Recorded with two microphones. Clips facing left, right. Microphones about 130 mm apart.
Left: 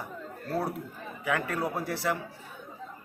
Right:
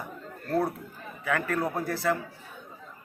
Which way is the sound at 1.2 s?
15° left (ahead or behind).